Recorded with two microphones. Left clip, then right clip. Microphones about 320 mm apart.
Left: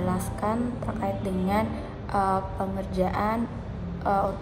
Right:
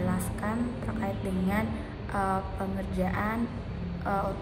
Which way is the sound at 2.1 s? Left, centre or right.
Left.